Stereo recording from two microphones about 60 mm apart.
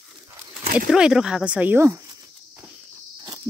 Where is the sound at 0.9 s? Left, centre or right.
Centre.